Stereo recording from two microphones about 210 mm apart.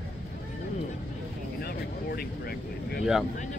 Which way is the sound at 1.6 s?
45° left (ahead or behind).